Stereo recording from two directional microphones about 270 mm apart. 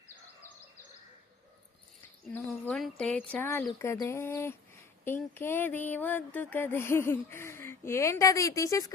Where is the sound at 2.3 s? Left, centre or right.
Centre.